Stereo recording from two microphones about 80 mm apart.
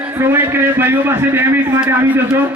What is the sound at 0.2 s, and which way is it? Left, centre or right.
A man's voice, right.